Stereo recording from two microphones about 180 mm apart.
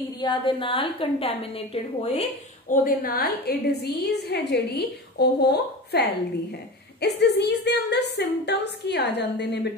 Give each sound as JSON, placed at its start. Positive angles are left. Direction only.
{"t": 0.2, "sound": "a woman's voice", "side_deg": 25}
{"t": 2.7, "sound": "a woman's voice", "side_deg": 50}